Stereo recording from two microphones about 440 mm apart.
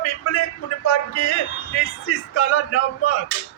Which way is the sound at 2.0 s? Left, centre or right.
Left.